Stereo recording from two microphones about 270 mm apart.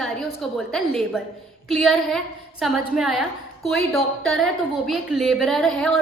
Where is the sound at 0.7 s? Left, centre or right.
Centre.